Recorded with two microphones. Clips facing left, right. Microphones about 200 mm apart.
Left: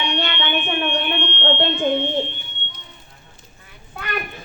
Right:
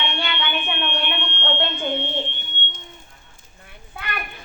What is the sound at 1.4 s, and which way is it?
Smoke detector, 55° left (ahead or behind).